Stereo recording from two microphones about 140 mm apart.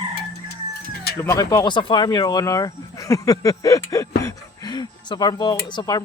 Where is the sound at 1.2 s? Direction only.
20° left (ahead or behind).